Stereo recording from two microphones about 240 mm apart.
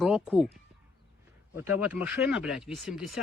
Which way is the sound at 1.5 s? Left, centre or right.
Centre.